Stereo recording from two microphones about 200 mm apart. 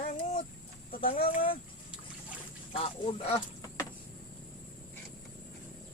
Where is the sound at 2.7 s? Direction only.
25° left (ahead or behind).